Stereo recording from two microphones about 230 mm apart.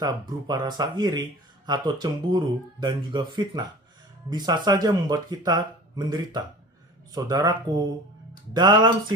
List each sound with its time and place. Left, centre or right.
0.0 s speech: centre